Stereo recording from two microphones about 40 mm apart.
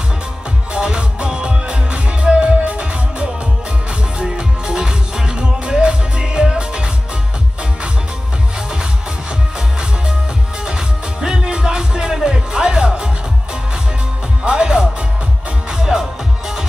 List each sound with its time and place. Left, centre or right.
0.7 s music: right
4.2 s music: centre
11.1 s music: centre
14.4 s music: centre